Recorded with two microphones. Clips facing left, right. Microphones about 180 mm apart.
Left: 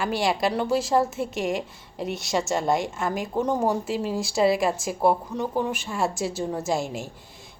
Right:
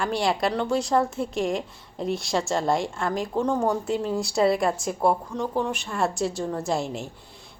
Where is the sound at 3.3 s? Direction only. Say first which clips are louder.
Even; 15° left (ahead or behind).